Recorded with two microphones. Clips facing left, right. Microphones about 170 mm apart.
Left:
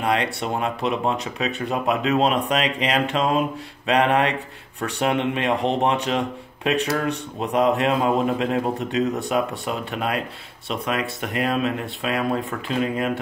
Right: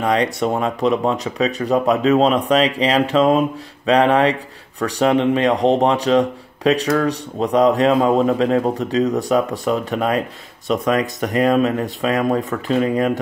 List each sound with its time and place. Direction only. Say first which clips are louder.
0.1 s speech: right 6 dB; 35° right (ahead or behind)